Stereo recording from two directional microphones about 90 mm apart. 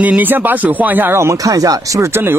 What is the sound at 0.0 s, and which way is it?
Speech, 20° right (ahead or behind).